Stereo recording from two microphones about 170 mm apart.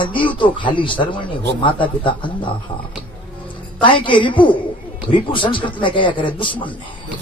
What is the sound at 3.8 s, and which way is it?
A man's voice, 30° left (ahead or behind).